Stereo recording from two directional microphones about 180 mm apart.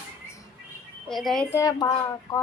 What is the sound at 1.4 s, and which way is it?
Speech, 15° left (ahead or behind).